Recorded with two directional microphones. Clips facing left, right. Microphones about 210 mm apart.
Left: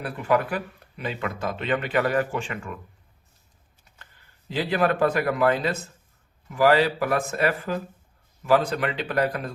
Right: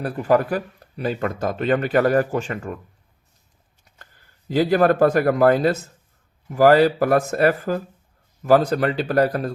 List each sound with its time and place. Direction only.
0.0 s speech: 40° right (ahead or behind)
3.9 s speech: 45° right (ahead or behind)